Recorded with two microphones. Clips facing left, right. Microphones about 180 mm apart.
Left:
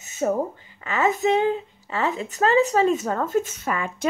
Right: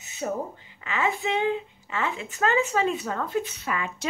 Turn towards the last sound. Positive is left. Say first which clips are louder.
# left 4 dB
turn(degrees=45)  # may be behind; listen again after turning